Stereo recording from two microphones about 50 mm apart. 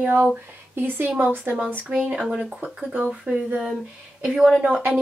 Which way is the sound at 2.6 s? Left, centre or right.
Right.